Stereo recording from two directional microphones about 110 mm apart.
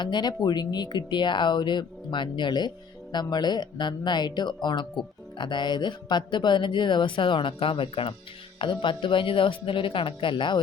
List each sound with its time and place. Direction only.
0.0 s speech: 40° left (ahead or behind)